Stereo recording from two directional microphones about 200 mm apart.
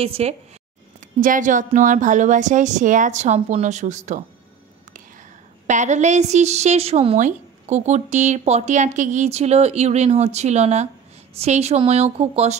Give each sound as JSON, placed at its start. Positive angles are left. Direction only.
{"t": 0.0, "sound": "a woman's voice", "side_deg": -30}
{"t": 1.2, "sound": "a woman's voice", "side_deg": -40}
{"t": 5.7, "sound": "a woman's voice", "side_deg": -35}